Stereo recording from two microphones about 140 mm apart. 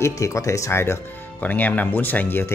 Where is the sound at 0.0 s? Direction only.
20° left (ahead or behind).